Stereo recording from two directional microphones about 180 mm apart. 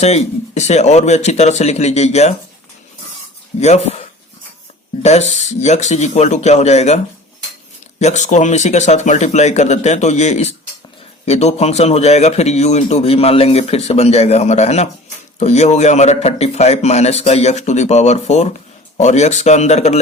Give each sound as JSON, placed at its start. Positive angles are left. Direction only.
{"t": 0.0, "sound": "a man's voice", "side_deg": 35}
{"t": 3.6, "sound": "a man's voice", "side_deg": 40}
{"t": 5.0, "sound": "a man's voice", "side_deg": 40}